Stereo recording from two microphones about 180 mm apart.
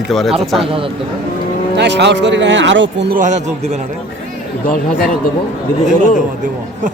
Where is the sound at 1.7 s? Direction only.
70° right (ahead or behind).